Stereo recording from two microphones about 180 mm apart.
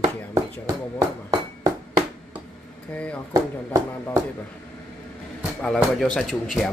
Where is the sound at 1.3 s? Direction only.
20° right (ahead or behind).